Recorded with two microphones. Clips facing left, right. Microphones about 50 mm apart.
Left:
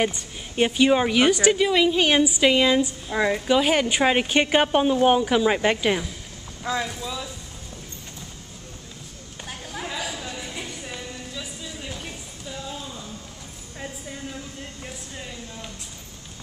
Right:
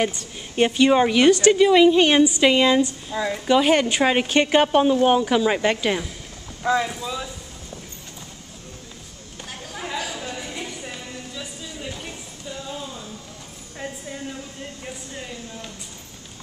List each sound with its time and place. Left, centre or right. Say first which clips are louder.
0.6 s a woman's voice: right 2 dB; centre
1.5 s a woman's voice: right 6 dB; centre
6.6 s speech: right 5 dB; centre
9.5 s a sound: right 2 dB; centre